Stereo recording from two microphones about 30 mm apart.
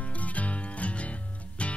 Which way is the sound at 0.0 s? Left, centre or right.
Left.